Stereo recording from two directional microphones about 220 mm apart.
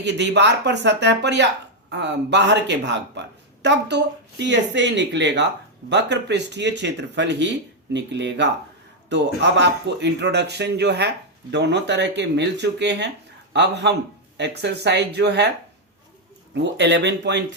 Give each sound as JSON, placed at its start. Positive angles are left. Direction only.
{"t": 0.0, "sound": "speech", "side_deg": -50}
{"t": 16.6, "sound": "speech", "side_deg": -50}